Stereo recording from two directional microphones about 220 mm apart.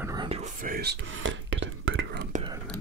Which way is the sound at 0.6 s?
45° right (ahead or behind).